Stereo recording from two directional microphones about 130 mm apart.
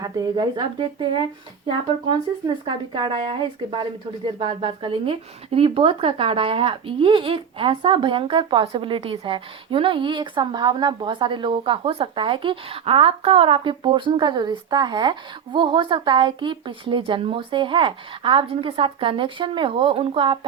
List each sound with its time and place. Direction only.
0.0 s a woman's voice: 30° right (ahead or behind)
2.6 s a woman's voice: 40° right (ahead or behind)